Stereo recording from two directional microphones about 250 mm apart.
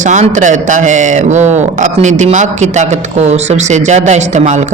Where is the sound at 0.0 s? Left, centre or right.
Right.